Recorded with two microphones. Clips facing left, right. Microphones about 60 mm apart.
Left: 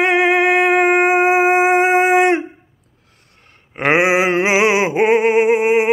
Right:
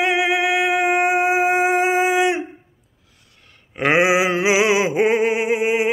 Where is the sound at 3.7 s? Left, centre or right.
Left.